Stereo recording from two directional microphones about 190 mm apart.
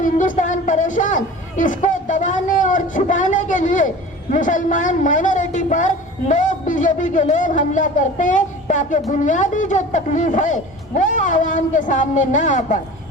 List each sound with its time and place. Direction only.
0.0 s speech: 45° left (ahead or behind)